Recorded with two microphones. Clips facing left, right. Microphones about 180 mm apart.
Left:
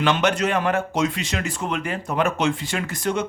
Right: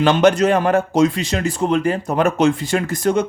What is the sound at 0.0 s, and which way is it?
Speech, 35° right (ahead or behind).